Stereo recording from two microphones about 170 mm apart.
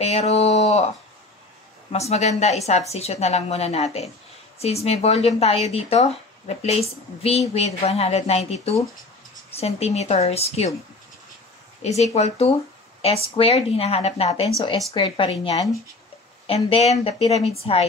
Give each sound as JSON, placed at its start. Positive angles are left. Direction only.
{"t": 0.0, "sound": "speech", "side_deg": 40}
{"t": 1.9, "sound": "speech", "side_deg": 40}
{"t": 12.0, "sound": "speech", "side_deg": 40}